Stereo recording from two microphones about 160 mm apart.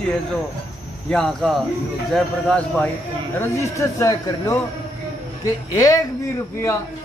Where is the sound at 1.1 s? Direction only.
5° left (ahead or behind).